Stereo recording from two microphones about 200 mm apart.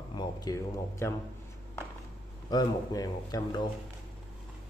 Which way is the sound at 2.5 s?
20° left (ahead or behind).